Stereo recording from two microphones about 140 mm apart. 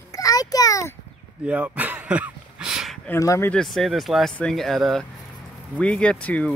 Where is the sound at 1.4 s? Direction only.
10° right (ahead or behind).